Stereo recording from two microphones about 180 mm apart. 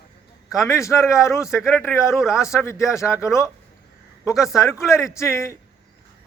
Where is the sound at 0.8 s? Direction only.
15° left (ahead or behind).